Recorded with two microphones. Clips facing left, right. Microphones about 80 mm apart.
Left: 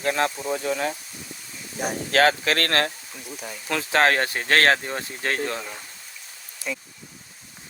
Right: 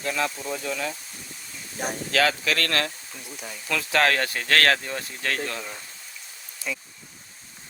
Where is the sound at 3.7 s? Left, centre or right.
Left.